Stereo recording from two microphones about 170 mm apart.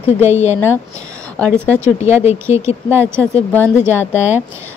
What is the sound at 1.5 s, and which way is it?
Speech, 10° left (ahead or behind).